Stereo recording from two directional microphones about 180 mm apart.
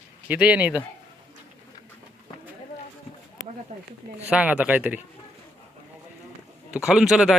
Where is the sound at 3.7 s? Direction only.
45° right (ahead or behind).